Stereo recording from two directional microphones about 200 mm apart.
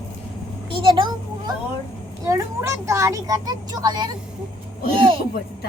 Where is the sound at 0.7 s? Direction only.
25° right (ahead or behind).